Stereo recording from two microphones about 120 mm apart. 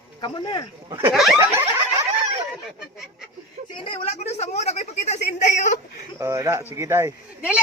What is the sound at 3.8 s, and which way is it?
A woman's voice, 60° left (ahead or behind).